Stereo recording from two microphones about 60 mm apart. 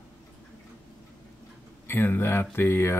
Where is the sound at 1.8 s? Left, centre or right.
Left.